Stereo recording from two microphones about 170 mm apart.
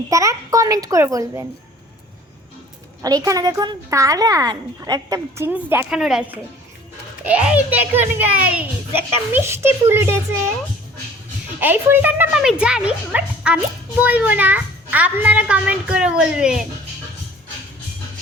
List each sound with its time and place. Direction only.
0.1 s speech: 20° right (ahead or behind)
3.0 s a child's voice: 20° right (ahead or behind)
11.6 s a child's voice: 10° right (ahead or behind)